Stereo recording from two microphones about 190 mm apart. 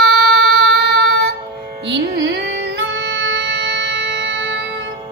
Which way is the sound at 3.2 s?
60° right (ahead or behind).